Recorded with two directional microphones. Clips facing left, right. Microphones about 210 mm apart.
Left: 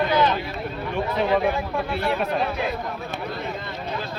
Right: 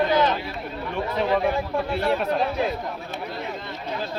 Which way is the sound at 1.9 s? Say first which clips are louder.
Right 2 dB; 35° right (ahead or behind).